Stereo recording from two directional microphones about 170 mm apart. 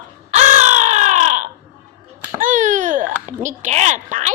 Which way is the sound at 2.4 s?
50° right (ahead or behind).